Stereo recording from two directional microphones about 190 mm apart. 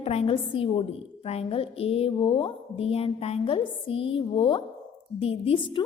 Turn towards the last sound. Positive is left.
turn(degrees=25)  # may be behind; listen again after turning